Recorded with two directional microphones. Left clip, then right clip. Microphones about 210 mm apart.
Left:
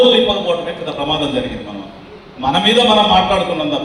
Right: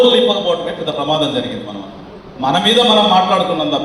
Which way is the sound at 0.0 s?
25° right (ahead or behind).